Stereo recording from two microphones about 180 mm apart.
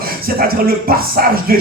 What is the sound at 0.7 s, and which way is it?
Speech, 55° right (ahead or behind).